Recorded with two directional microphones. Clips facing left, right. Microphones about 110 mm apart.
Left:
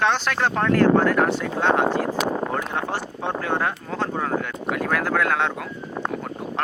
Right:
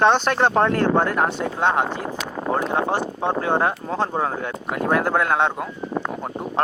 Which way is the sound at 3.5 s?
30° right (ahead or behind).